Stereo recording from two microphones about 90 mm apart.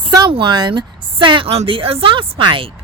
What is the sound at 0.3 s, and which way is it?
A woman's voice, 65° right (ahead or behind).